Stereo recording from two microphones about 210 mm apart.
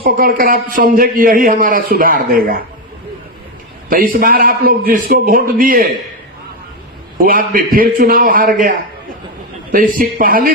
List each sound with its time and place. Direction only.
0.0 s a man's voice: 40° right (ahead or behind)
3.8 s a man's voice: 40° right (ahead or behind)
7.2 s a man's voice: 40° right (ahead or behind)
9.7 s a man's voice: 40° right (ahead or behind)